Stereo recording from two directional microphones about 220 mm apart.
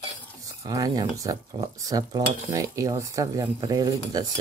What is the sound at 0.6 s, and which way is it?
Cutlery, 15° right (ahead or behind).